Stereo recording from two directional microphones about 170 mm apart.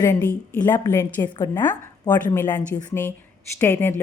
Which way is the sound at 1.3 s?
25° left (ahead or behind).